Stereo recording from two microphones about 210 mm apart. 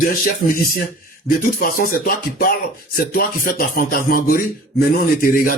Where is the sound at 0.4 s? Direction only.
45° left (ahead or behind).